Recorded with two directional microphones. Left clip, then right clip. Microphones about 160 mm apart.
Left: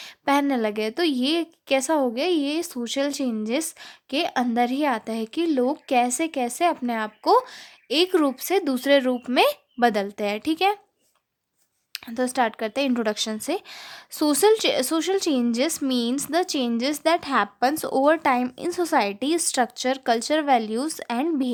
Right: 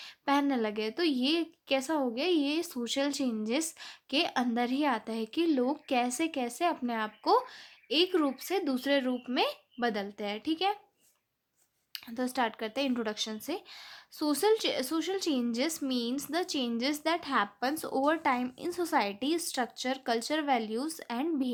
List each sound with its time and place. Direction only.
0.0 s a woman's voice: 35° left (ahead or behind)
11.9 s a woman's voice: 35° left (ahead or behind)